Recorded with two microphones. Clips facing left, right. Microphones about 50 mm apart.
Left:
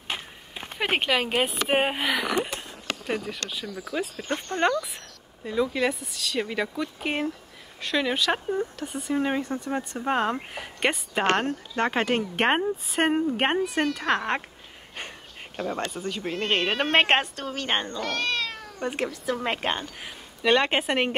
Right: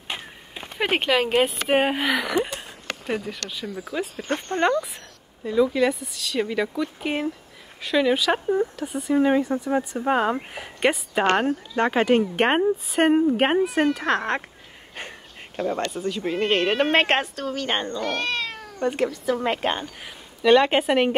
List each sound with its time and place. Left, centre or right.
0.7 s speech: centre
3.6 s speech: right
5.4 s speech: centre
15.0 s a sound: centre
15.9 s speech: centre
16.2 s speech: centre
18.8 s speech: centre